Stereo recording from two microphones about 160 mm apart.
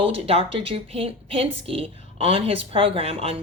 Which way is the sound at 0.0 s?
35° right (ahead or behind).